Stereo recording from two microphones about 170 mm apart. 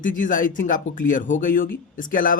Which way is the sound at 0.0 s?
50° left (ahead or behind).